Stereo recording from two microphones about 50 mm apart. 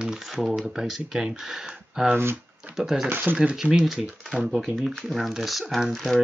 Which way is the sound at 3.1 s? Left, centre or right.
Right.